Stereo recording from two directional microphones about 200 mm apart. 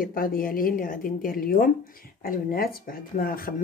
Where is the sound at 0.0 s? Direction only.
45° left (ahead or behind).